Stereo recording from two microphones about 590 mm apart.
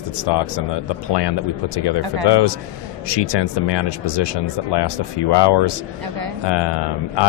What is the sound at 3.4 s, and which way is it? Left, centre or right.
Speech, left.